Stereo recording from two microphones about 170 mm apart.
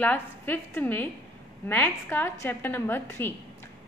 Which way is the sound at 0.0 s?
10° left (ahead or behind).